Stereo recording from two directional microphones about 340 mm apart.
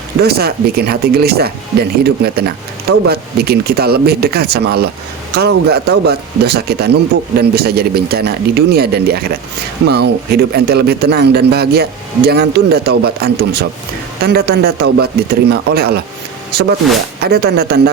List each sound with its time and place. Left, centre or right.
0.2 s a man's voice: right
16.8 s speech: centre
17.2 s a man's voice: right